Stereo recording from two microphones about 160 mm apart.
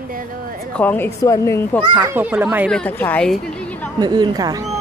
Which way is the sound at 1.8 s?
30° right (ahead or behind).